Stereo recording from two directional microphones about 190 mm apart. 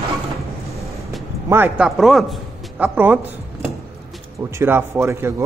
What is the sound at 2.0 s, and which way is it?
Speech, centre (ahead or behind).